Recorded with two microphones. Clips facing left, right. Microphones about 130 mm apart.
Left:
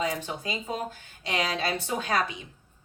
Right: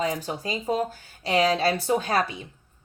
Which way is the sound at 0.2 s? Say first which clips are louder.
Right 3 dB; 40° right (ahead or behind).